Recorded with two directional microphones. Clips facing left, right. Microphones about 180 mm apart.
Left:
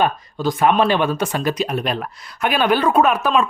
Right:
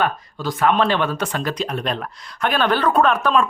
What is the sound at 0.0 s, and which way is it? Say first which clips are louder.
Speech: left 3 dB; 15° left (ahead or behind).